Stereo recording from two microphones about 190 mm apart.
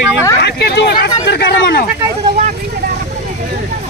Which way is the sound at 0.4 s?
60° left (ahead or behind).